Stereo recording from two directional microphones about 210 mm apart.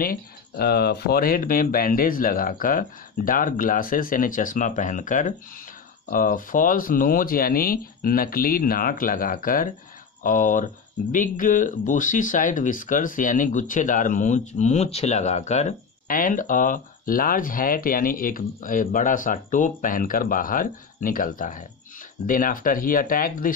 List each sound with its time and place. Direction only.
0.0 s speech: 45° left (ahead or behind)